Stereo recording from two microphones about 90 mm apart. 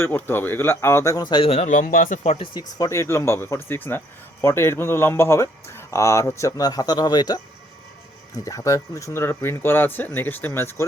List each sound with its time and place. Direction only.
0.0 s speech: 25° left (ahead or behind)
1.2 s speech: 70° left (ahead or behind)
2.6 s speech: 45° left (ahead or behind)
2.9 s speech: 30° left (ahead or behind)
6.6 s speech: 45° left (ahead or behind)
8.4 s speech: 40° left (ahead or behind)